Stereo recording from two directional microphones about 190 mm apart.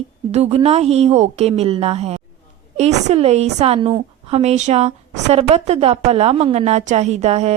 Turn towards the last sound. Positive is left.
turn(degrees=-35)  # may be behind; listen again after turning